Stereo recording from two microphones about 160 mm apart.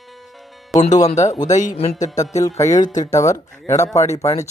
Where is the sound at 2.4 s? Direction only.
20° left (ahead or behind).